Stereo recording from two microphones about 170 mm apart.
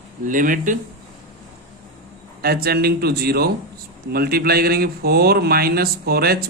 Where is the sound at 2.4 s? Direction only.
65° right (ahead or behind).